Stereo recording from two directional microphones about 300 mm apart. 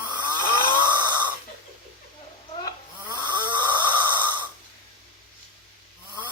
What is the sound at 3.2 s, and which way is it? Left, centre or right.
Snoring, centre.